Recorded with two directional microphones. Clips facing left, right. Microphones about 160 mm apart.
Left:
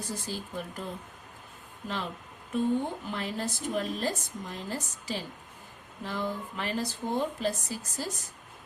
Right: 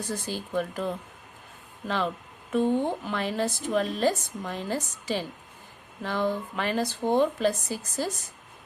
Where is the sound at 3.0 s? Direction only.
85° right.